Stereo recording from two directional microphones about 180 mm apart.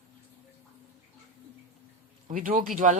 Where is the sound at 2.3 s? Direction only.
50° right (ahead or behind).